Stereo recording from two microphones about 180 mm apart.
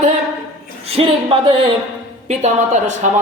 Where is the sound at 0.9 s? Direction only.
30° right (ahead or behind).